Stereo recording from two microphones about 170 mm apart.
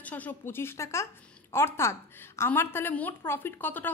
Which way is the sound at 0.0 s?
10° left (ahead or behind).